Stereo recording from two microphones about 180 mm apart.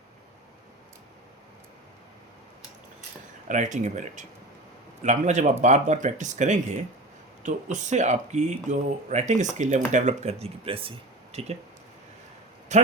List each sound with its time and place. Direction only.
3.5 s speech: 45° right (ahead or behind)
12.7 s speech: 40° right (ahead or behind)